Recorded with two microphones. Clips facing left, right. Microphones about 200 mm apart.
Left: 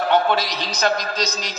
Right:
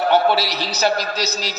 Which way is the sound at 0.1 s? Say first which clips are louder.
Right 1 dB; 10° right (ahead or behind).